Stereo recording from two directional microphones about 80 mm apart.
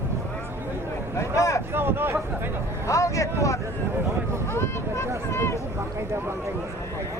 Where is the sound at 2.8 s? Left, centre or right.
Left.